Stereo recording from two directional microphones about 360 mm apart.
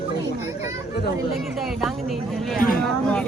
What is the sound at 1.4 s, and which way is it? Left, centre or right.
Speech, centre.